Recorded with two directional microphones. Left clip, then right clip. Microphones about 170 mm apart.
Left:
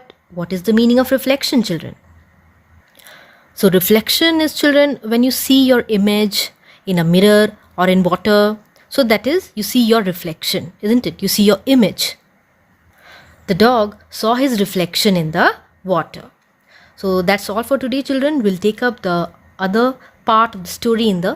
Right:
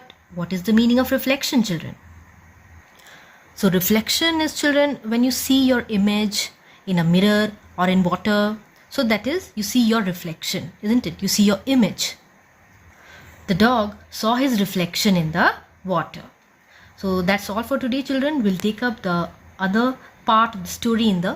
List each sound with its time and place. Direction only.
0.1 s speech: 60° left (ahead or behind)
3.0 s speech: 50° left (ahead or behind)